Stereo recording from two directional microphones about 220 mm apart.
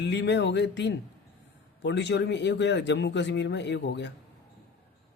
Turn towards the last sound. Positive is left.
turn(degrees=55)  # may be behind; listen again after turning